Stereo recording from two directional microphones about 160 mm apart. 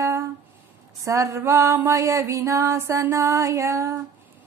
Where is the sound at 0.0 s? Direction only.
20° right (ahead or behind).